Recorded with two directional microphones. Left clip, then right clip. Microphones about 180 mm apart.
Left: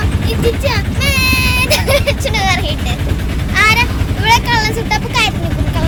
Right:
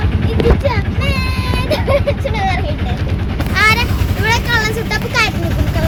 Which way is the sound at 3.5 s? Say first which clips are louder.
Left 2 dB; 25° right (ahead or behind).